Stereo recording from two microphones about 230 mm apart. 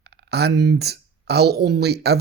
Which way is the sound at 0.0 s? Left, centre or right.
Right.